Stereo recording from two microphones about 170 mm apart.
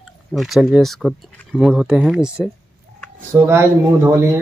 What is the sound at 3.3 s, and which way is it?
Speech, 15° right (ahead or behind).